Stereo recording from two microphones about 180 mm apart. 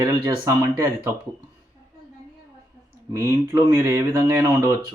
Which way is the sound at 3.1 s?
15° right (ahead or behind).